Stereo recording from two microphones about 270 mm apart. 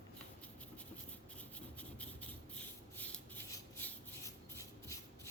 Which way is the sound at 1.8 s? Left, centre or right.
Centre.